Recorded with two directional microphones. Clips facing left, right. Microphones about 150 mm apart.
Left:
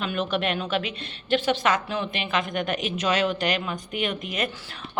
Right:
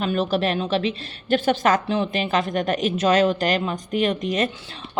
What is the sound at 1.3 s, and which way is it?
Speech, 45° right (ahead or behind).